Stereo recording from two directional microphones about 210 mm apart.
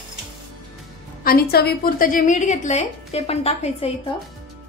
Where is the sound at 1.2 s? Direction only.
45° left (ahead or behind).